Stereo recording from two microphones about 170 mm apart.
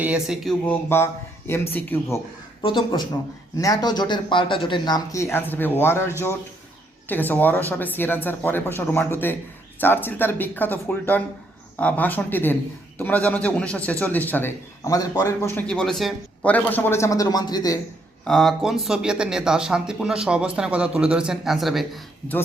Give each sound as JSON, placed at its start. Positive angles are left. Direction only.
{"t": 0.0, "sound": "speech", "side_deg": -5}
{"t": 0.6, "sound": "a man's voice", "side_deg": 10}
{"t": 2.6, "sound": "a man's voice", "side_deg": 30}
{"t": 18.3, "sound": "speech", "side_deg": 0}